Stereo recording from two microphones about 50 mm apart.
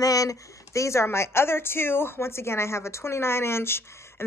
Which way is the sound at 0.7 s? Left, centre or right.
Left.